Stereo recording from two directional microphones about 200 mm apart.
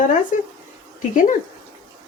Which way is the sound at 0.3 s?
40° left (ahead or behind).